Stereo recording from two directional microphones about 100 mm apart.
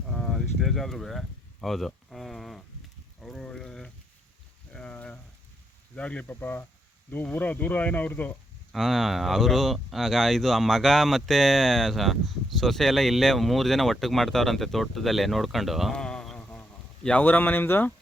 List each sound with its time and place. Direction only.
0.1 s a sound: centre (ahead or behind)
6.0 s speech: 10° left (ahead or behind)
8.7 s speech: centre (ahead or behind); by 17.9 s 20° left (ahead or behind)